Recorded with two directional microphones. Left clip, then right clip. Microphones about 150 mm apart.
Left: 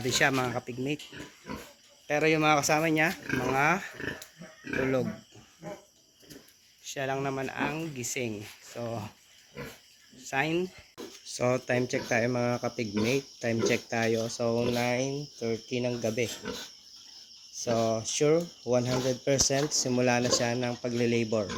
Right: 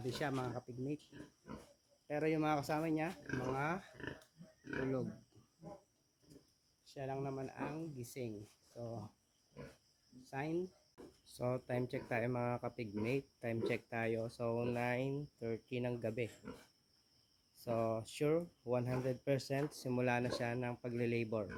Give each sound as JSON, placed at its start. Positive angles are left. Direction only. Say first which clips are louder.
{"t": 0.0, "sound": "speech", "louder": "left 15 dB", "side_deg": 0}
{"t": 2.0, "sound": "speech", "louder": "left 12 dB", "side_deg": -15}
{"t": 6.8, "sound": "speech", "louder": "left 12 dB", "side_deg": 0}
{"t": 8.7, "sound": "speech", "louder": "left 12 dB", "side_deg": 10}
{"t": 10.2, "sound": "speech", "louder": "left 13 dB", "side_deg": -10}
{"t": 17.7, "sound": "speech", "louder": "left 10 dB", "side_deg": -15}